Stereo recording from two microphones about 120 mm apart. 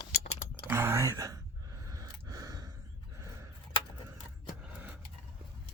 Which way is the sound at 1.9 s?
30° right (ahead or behind).